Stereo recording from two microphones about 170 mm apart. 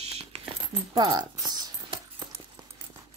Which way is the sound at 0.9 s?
25° right (ahead or behind).